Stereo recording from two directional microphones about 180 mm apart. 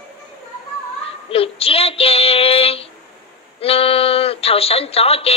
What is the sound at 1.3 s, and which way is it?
Speech, 30° left (ahead or behind).